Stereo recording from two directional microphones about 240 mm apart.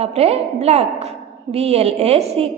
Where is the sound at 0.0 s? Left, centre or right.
Right.